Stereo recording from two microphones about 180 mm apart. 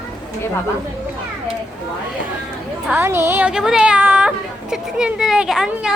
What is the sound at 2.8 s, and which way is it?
Speech, 10° right (ahead or behind).